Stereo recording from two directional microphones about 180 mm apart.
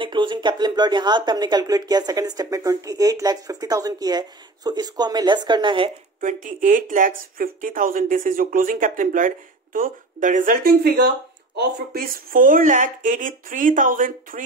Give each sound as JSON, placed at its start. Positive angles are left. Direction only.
{"t": 0.0, "sound": "speech", "side_deg": -25}
{"t": 6.2, "sound": "speech", "side_deg": -45}